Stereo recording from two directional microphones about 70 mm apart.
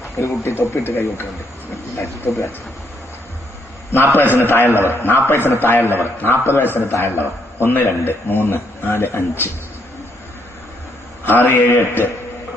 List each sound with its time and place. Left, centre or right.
0.4 s speech: left
3.9 s a man's voice: left
11.3 s a man's voice: left